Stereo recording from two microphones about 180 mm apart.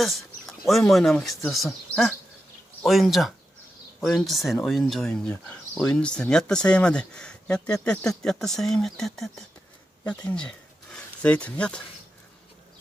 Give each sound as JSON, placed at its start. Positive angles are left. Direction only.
{"t": 0.0, "sound": "speech", "side_deg": 0}